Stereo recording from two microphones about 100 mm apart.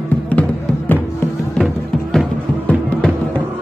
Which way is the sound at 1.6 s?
Centre (ahead or behind).